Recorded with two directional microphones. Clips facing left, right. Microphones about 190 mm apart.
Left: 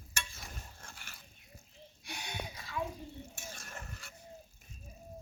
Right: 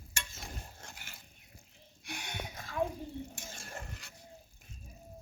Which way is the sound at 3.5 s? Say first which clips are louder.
Right 3 dB; 30° right (ahead or behind).